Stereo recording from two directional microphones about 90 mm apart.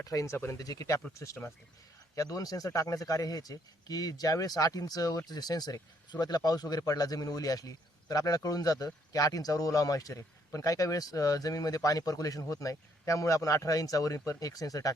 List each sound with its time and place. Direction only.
0.0 s speech: 40° left (ahead or behind)